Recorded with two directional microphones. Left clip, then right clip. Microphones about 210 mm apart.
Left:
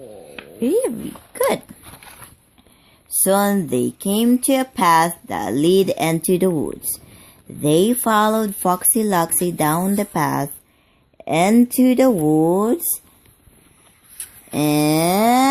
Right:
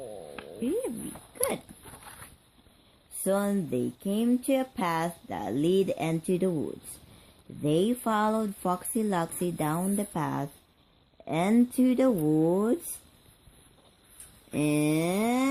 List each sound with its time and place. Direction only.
0.4 s a sound: 10° right (ahead or behind)
3.2 s speech: 20° left (ahead or behind)
14.5 s speech: 15° left (ahead or behind)